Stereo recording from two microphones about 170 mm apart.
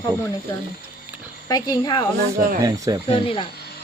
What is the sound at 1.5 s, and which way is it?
Speech, 20° left (ahead or behind).